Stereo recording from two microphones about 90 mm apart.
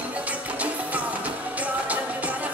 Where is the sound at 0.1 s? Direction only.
15° right (ahead or behind).